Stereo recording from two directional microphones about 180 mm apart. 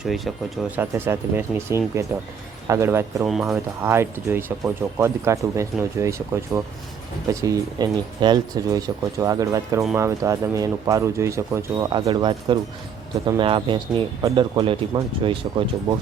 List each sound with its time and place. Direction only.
0.0 s speech: centre (ahead or behind)
0.8 s speech: 10° right (ahead or behind)
3.2 s speech: centre (ahead or behind)
3.8 s speech: 15° right (ahead or behind)